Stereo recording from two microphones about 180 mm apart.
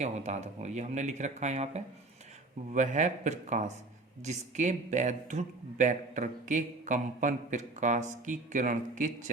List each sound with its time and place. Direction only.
0.0 s speech: 40° right (ahead or behind)